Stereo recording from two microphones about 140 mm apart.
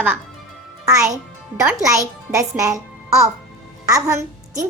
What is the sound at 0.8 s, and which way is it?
Music, 25° right (ahead or behind).